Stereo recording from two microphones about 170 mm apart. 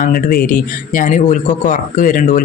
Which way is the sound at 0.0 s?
55° left (ahead or behind).